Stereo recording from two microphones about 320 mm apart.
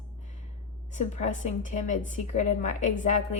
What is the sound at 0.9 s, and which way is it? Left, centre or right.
A woman's voice, left.